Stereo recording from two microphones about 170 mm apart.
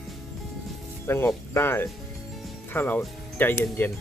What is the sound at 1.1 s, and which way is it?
Speech, 15° left (ahead or behind).